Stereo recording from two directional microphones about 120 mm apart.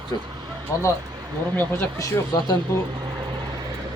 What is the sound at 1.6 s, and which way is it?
Speech, 15° left (ahead or behind).